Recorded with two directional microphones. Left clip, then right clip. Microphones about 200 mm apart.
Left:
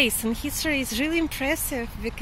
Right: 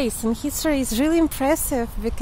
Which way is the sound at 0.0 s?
10° right (ahead or behind).